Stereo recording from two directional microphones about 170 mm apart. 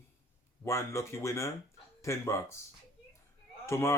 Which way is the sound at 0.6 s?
15° left (ahead or behind).